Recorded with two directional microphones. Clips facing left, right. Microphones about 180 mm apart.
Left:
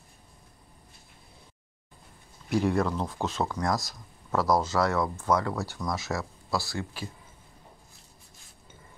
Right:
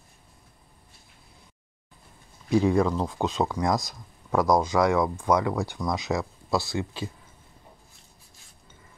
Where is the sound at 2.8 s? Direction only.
15° right (ahead or behind).